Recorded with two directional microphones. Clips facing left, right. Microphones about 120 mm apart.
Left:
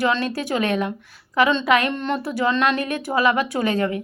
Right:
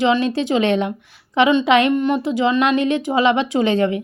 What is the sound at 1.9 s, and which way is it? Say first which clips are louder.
A woman's voice: right 6 dB; 10° right (ahead or behind).